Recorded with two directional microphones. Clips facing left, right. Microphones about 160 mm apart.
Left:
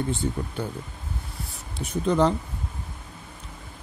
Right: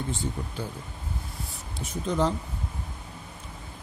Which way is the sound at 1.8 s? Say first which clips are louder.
Left 5 dB; 65° left (ahead or behind).